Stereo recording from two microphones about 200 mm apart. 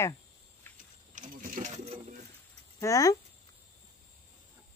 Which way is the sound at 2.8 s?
15° left (ahead or behind).